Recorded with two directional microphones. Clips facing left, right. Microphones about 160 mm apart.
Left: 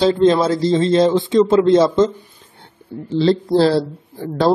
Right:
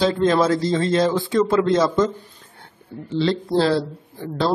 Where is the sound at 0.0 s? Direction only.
30° left (ahead or behind).